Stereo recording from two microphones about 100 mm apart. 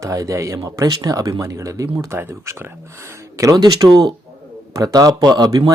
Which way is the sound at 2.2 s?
20° right (ahead or behind).